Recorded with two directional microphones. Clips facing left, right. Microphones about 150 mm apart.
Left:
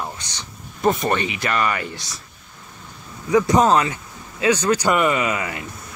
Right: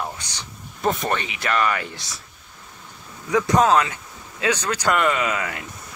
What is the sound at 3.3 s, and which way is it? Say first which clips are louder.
Speech: left 2 dB; 5° left (ahead or behind).